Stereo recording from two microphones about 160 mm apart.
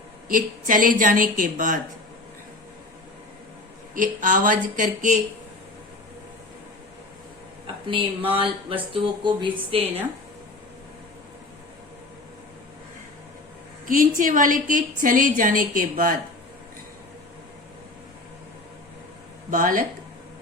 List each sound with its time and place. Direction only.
0.3 s a woman's voice: 60° right (ahead or behind)
3.9 s a woman's voice: 55° right (ahead or behind)
7.9 s speech: 35° right (ahead or behind)
13.8 s a woman's voice: 60° right (ahead or behind)
19.5 s a woman's voice: 60° right (ahead or behind)